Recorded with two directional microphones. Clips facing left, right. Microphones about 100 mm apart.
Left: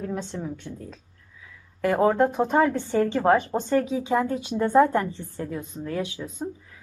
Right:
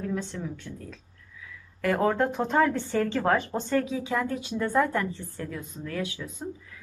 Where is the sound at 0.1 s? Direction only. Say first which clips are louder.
Left 1 dB; 20° left (ahead or behind).